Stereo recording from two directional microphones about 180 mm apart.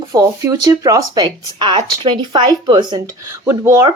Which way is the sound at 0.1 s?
20° right (ahead or behind).